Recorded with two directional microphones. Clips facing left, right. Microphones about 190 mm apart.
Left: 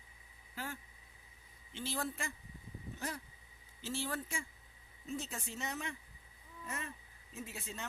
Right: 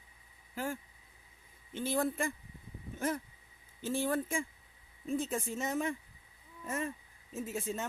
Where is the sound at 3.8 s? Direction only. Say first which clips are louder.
Right 8 dB; 50° right (ahead or behind).